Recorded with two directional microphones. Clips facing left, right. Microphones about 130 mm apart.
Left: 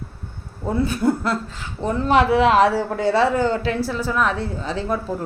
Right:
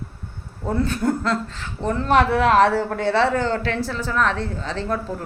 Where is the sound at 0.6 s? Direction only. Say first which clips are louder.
Left 2 dB; 5° left (ahead or behind).